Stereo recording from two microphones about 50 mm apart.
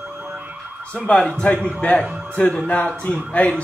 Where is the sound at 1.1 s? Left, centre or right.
Left.